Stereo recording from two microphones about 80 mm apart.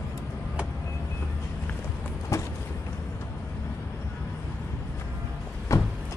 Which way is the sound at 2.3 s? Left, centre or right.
Left.